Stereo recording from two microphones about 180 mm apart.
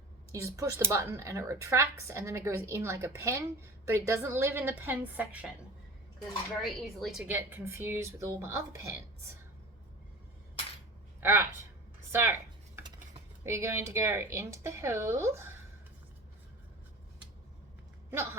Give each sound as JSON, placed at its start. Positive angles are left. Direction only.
{"t": 0.3, "sound": "speech", "side_deg": -15}
{"t": 6.6, "sound": "speech", "side_deg": 0}
{"t": 11.2, "sound": "a woman's voice", "side_deg": -15}
{"t": 12.1, "sound": "a sound", "side_deg": -15}
{"t": 13.4, "sound": "speech", "side_deg": -15}